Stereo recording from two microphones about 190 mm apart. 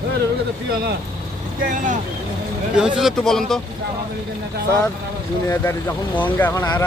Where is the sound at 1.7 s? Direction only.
40° right (ahead or behind).